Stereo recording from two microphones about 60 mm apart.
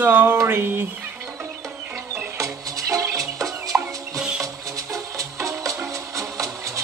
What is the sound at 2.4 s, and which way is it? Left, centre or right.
Music, right.